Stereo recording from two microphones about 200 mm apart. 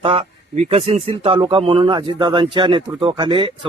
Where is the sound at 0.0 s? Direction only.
30° right (ahead or behind).